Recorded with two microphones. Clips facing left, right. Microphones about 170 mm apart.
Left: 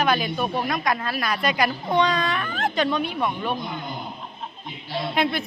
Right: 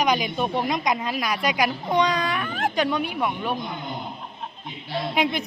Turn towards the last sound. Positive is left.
turn(degrees=-15)  # may be behind; listen again after turning